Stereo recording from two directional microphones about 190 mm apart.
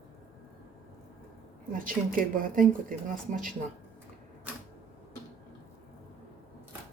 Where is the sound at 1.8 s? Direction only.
45° right (ahead or behind).